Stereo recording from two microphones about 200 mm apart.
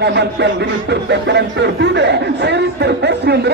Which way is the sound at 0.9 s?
60° right (ahead or behind).